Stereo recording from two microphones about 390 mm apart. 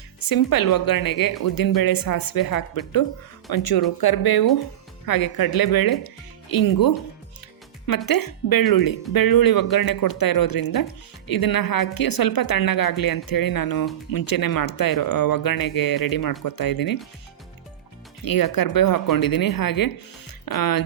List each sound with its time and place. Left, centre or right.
0.3 s speech: left
7.9 s speech: left
18.3 s speech: left